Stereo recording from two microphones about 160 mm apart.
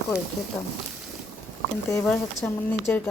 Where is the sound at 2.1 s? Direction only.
10° left (ahead or behind).